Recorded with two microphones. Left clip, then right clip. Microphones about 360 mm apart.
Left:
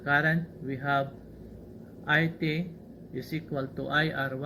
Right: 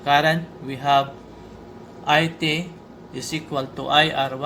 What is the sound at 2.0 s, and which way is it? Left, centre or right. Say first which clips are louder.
A man's voice: right 8 dB; right.